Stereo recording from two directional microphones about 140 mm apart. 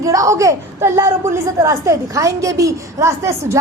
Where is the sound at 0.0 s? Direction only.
25° right (ahead or behind).